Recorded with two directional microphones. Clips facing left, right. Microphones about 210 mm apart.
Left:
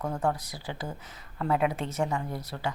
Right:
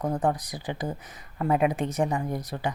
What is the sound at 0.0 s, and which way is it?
Speech, 15° right (ahead or behind).